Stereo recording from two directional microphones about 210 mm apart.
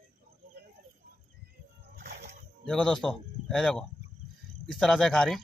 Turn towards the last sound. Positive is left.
turn(degrees=5)  # may be behind; listen again after turning